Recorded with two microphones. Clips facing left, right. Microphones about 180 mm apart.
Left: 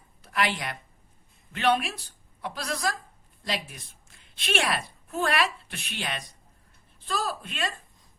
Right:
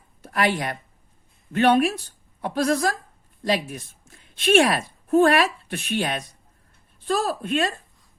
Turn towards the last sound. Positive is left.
turn(degrees=-50)  # may be behind; listen again after turning